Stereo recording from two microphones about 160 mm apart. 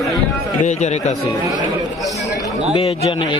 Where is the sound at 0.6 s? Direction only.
45° left (ahead or behind).